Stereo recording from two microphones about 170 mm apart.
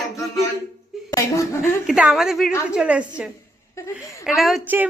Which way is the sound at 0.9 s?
Centre (ahead or behind).